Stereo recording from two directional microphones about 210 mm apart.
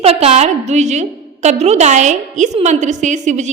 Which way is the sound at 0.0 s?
30° right (ahead or behind).